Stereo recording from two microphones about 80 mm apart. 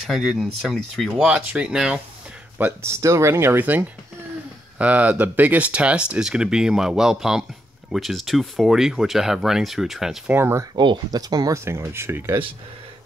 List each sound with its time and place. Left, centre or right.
0.0 s speech: centre
2.8 s speech: right; by 10.1 s centre
10.3 s speech: right
11.1 s speech: right
11.5 s speech: right